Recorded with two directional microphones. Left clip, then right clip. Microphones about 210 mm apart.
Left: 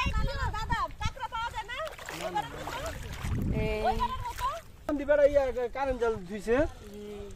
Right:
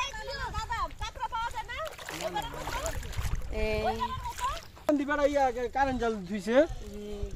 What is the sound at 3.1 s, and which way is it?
Boat, 10° right (ahead or behind).